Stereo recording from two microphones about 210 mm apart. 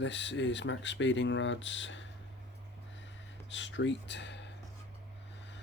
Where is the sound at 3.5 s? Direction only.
60° left (ahead or behind).